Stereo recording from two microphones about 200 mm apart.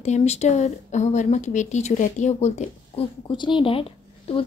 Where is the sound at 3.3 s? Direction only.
25° left (ahead or behind).